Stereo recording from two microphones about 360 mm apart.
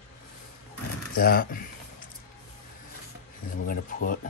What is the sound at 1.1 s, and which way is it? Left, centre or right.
Speech, left.